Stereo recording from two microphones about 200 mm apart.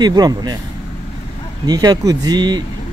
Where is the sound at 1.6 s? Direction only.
20° right (ahead or behind).